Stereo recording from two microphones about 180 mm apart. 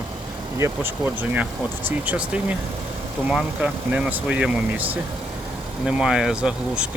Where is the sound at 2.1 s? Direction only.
5° right (ahead or behind).